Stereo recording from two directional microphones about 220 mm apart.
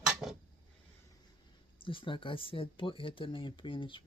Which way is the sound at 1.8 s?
25° left (ahead or behind).